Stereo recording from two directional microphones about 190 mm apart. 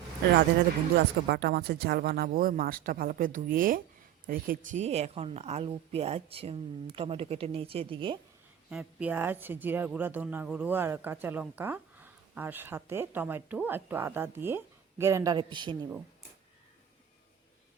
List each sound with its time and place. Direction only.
1.3 s a woman's voice: 60° right (ahead or behind); by 8.2 s 25° right (ahead or behind)
8.7 s speech: 5° right (ahead or behind); by 15.9 s 25° right (ahead or behind)